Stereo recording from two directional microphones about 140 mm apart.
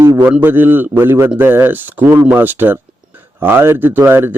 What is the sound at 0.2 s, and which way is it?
Speech, 15° right (ahead or behind).